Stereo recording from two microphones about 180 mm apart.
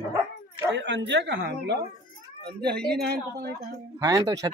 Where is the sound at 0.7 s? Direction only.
80° right.